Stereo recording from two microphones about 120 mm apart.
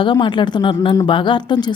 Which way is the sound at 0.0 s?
40° left (ahead or behind).